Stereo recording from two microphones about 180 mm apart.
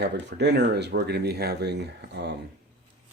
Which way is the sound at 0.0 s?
70° right (ahead or behind).